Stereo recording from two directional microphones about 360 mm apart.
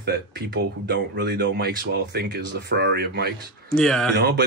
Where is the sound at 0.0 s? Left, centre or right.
Right.